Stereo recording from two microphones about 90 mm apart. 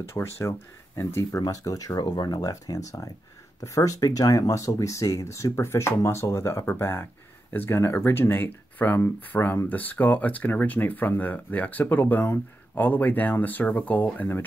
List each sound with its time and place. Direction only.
0.1 s speech: 30° left (ahead or behind)